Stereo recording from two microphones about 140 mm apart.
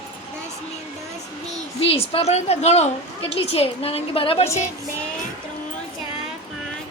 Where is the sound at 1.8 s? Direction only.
45° left (ahead or behind).